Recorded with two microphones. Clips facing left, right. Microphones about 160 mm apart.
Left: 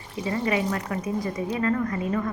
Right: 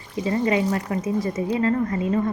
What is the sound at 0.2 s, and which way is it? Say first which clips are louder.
A woman's voice: right 4 dB; 25° right (ahead or behind).